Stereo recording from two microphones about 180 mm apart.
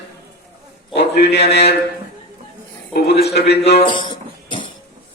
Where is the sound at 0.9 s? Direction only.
70° left (ahead or behind).